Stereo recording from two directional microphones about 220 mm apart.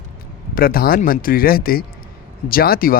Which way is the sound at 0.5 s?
40° left (ahead or behind).